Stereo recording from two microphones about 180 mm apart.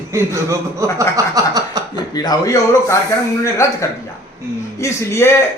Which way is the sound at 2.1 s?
20° left (ahead or behind).